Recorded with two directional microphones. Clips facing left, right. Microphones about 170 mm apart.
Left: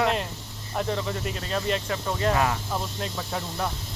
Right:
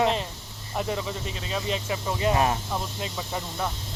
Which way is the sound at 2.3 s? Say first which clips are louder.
Right 1 dB; 25° right (ahead or behind).